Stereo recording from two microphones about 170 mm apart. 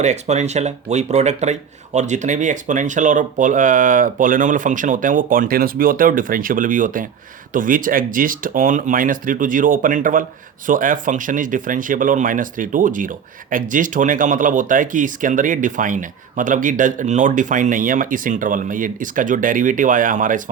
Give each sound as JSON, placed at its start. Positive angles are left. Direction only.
{"t": 0.0, "sound": "speech", "side_deg": -45}